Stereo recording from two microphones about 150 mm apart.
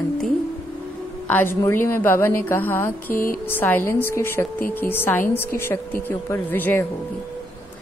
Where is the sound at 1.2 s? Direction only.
15° left (ahead or behind).